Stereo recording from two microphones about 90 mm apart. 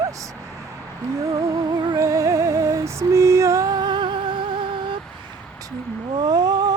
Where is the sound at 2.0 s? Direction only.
35° right (ahead or behind).